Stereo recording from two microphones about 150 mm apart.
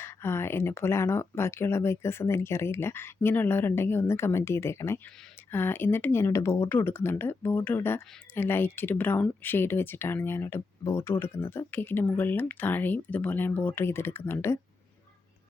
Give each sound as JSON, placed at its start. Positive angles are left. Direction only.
{"t": 0.0, "sound": "speech", "side_deg": 15}